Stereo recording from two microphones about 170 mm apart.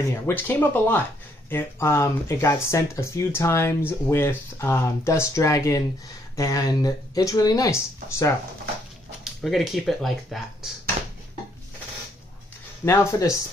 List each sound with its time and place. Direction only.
0.1 s speech: 10° left (ahead or behind)
9.2 s speech: centre (ahead or behind)
12.8 s speech: 15° left (ahead or behind)